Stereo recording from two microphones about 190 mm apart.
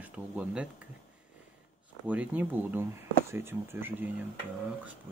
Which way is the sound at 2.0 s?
10° right (ahead or behind).